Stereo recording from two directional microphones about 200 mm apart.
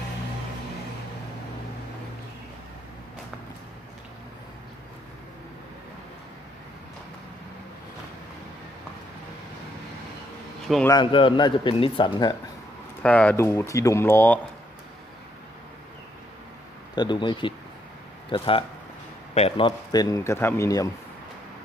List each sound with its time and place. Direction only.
10.8 s speech: 20° left (ahead or behind)
13.0 s a man's voice: 5° left (ahead or behind)
16.9 s a man's voice: 20° left (ahead or behind)